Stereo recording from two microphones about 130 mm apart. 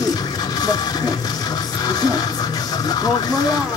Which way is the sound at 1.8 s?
30° left (ahead or behind).